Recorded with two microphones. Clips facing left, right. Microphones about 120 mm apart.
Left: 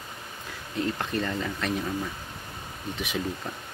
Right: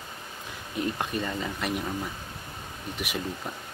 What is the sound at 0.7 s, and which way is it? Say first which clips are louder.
Speech: left 1 dB; 15° right (ahead or behind).